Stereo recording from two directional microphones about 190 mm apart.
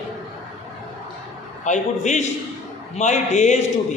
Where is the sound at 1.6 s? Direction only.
40° left (ahead or behind).